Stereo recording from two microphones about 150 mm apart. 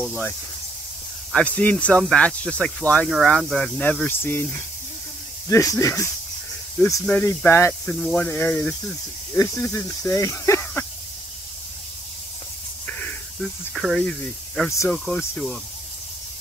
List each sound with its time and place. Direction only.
1.3 s speech: 10° left (ahead or behind)
7.1 s speech: 10° left (ahead or behind)
7.8 s speech: 5° left (ahead or behind)
12.8 s snake: 10° left (ahead or behind)
13.7 s speech: centre (ahead or behind)